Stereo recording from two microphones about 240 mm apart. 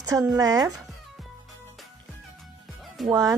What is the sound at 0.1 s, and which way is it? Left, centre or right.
Speech, centre.